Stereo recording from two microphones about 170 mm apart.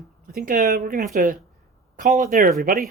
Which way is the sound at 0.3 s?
55° right (ahead or behind).